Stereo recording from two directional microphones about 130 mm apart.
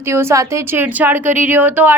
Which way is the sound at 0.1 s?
20° right (ahead or behind).